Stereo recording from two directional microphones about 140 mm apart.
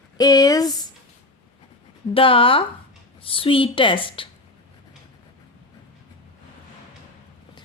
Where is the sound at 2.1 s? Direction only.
40° left (ahead or behind).